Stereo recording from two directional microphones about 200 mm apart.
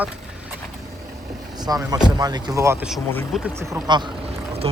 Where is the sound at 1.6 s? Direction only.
20° right (ahead or behind).